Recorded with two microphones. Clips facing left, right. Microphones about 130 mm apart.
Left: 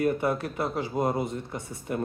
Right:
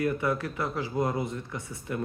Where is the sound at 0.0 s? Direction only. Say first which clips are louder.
Left 2 dB; 25° left (ahead or behind).